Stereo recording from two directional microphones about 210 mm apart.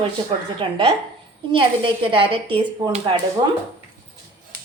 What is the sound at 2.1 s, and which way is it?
A woman's voice, 25° right (ahead or behind).